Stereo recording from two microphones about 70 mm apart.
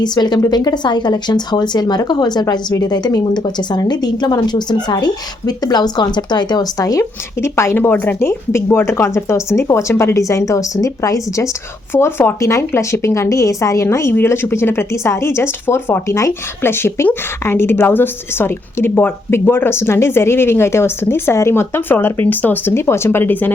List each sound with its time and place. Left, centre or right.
0.0 s speech: left
7.0 s speech: left
10.2 s speech: left
11.9 s speech: left
12.4 s speech: left
16.0 s speech: left
16.6 s speech: left